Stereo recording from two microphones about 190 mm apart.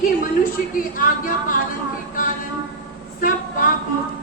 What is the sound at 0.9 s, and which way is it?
Speech, 45° left (ahead or behind).